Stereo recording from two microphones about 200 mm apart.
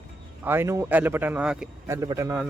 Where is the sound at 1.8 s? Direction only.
15° right (ahead or behind).